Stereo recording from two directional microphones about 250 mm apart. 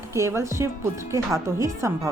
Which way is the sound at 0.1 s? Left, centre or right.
Centre.